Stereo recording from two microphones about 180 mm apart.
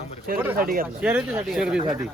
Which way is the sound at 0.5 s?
50° right (ahead or behind).